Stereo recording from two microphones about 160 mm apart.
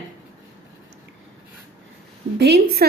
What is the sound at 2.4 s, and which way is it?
Speech, 90° right.